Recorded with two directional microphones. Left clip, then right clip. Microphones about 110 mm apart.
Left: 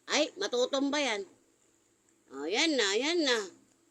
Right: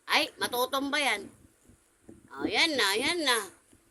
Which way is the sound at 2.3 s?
25° right (ahead or behind).